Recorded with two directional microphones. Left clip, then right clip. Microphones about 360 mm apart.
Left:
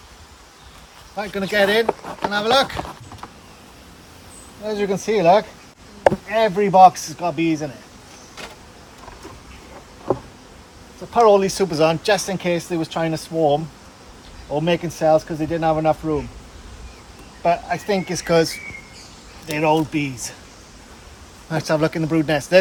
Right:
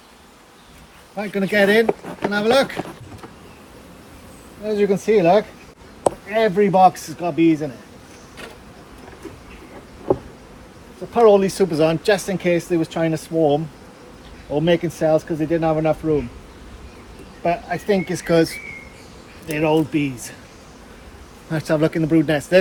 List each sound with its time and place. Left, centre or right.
1.1 s speech: centre
4.6 s speech: centre
11.1 s speech: centre
14.6 s speech: centre
17.4 s speech: centre
21.5 s speech: centre